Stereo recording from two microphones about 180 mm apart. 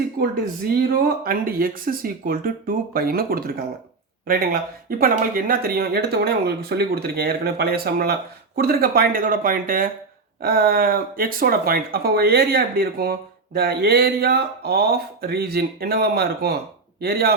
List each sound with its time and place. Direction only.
0.2 s speech: 60° right (ahead or behind)